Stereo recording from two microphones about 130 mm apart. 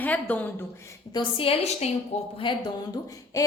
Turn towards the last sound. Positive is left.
turn(degrees=25)  # may be behind; listen again after turning